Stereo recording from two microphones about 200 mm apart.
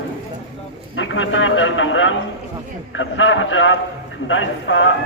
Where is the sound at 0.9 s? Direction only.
75° left (ahead or behind).